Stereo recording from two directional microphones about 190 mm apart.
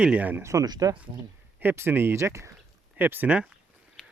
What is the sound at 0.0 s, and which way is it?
Speech, 5° right (ahead or behind).